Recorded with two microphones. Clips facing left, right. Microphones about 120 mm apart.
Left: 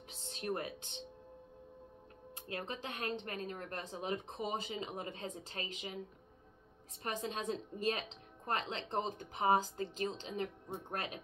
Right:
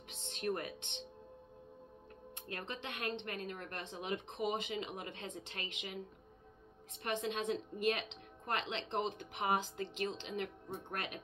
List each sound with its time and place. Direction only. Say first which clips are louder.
0.5 s speech: right 1 dB; 20° left (ahead or behind)
2.6 s a woman's voice: even; 35° left (ahead or behind)
7.0 s a woman's voice: right 2 dB; 35° left (ahead or behind)